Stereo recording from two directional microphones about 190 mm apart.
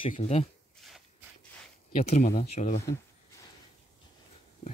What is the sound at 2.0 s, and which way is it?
Speech, 35° left (ahead or behind).